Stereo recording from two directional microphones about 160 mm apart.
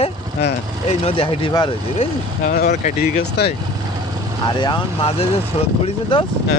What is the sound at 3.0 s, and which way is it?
Speech, 85° left.